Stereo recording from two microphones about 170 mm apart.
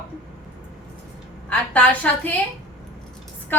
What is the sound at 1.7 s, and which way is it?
Speech, 10° left (ahead or behind).